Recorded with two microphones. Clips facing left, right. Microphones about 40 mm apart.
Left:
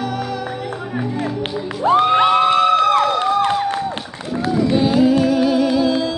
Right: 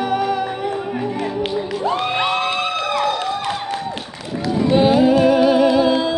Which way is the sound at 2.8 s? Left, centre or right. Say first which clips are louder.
Left 5 dB; left.